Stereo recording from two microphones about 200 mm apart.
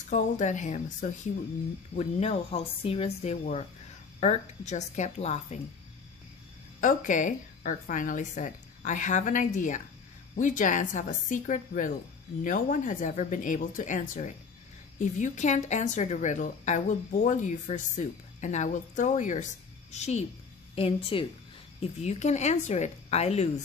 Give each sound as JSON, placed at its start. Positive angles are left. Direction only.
{"t": 0.1, "sound": "a woman's voice", "side_deg": 35}
{"t": 6.8, "sound": "a woman's voice", "side_deg": 40}